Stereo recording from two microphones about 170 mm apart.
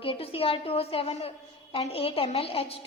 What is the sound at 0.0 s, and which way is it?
A woman's voice, 35° left (ahead or behind).